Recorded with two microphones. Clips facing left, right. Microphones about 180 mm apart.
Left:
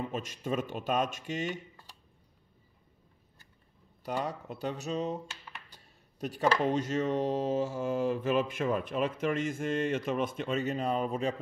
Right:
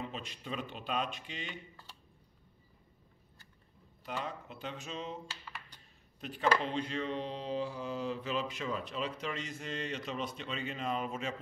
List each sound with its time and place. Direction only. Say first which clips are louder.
0.0 s mantra: left 7 dB; 45° left (ahead or behind)
4.0 s speech: left 6 dB; 40° left (ahead or behind)
6.6 s mantra: left 7 dB; 45° left (ahead or behind)